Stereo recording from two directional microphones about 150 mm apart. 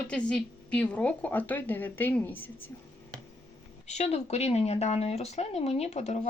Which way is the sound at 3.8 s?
50° left (ahead or behind).